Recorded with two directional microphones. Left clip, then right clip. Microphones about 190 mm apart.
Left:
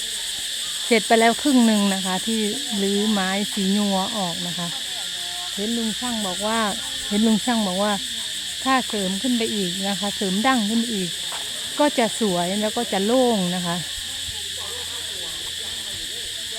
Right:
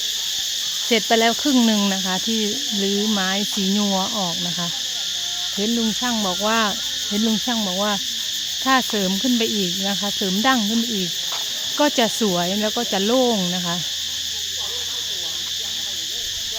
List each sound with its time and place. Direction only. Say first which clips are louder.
0.9 s cricket: left 1 dB; 5° left (ahead or behind)
6.1 s cricket: right 4 dB; 20° right (ahead or behind)
7.3 s cricket: left 2 dB; 5° left (ahead or behind)
9.0 s cricket: right 3 dB; 15° right (ahead or behind)
9.8 s cricket: right 2 dB; centre (ahead or behind)
11.8 s cricket: right 1 dB; centre (ahead or behind)